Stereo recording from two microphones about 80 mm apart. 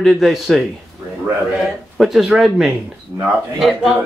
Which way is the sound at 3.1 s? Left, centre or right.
Right.